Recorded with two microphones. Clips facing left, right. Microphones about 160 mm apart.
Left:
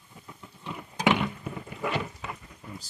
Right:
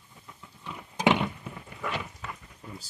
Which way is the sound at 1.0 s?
20° right (ahead or behind).